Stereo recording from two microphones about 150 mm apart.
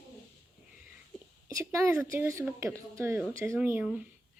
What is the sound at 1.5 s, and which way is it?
Speech, 20° right (ahead or behind).